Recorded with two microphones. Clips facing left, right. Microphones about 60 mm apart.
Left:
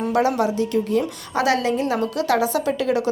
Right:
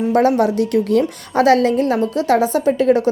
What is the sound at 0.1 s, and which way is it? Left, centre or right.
Speech, right.